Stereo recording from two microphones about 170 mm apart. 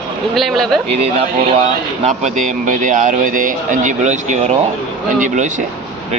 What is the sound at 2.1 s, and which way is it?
A man's voice, 50° right (ahead or behind).